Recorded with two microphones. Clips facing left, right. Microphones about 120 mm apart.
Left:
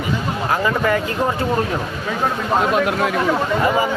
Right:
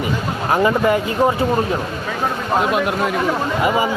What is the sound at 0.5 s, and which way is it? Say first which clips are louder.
Speech: right 4 dB; 20° right (ahead or behind).